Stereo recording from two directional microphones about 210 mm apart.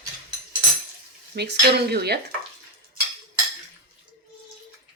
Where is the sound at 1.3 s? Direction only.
50° right (ahead or behind).